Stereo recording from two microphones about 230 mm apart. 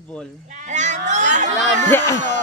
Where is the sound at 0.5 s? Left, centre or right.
Right.